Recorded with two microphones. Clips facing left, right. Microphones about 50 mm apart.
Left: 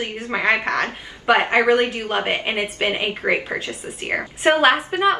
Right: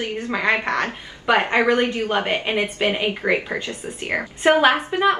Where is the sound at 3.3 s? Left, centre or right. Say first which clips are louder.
Left 2 dB; centre.